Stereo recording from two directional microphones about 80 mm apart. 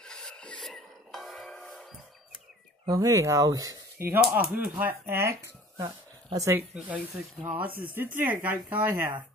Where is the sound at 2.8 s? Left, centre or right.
Right.